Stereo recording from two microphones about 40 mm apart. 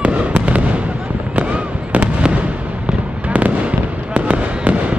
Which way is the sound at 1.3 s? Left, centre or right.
Right.